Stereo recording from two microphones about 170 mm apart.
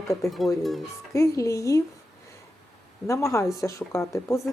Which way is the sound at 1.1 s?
15° left (ahead or behind).